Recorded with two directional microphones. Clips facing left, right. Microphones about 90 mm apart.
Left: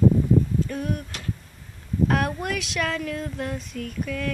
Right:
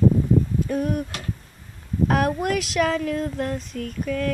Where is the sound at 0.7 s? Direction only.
10° right (ahead or behind).